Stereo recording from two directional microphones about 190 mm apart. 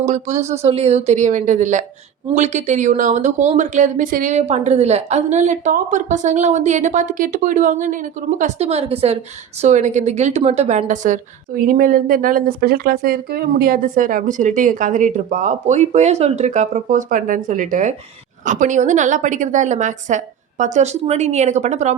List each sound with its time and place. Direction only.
0.0 s a woman's voice: 40° right (ahead or behind)